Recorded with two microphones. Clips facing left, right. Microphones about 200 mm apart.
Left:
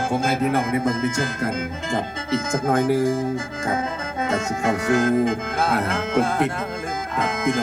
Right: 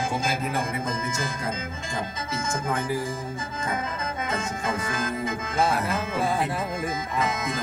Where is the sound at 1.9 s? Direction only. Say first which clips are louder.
Left 8 dB; 60° left (ahead or behind); by 3.1 s 80° left.